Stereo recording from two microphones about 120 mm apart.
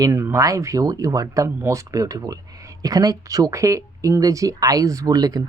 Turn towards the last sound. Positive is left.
turn(degrees=-30)  # may be behind; listen again after turning